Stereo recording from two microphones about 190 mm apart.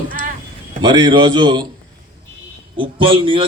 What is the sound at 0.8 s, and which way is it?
Speech, 25° right (ahead or behind).